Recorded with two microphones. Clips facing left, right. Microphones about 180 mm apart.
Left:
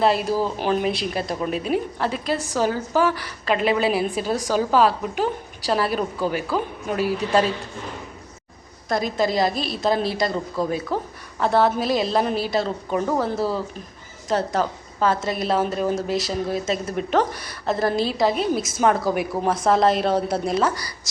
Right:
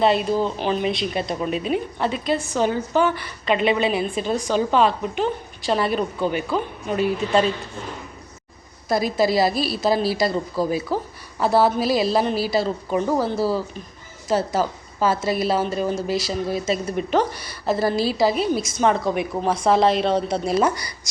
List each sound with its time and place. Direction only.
0.0 s a woman's voice: centre (ahead or behind)
8.9 s a woman's voice: 5° right (ahead or behind)
20.6 s speech: 15° right (ahead or behind)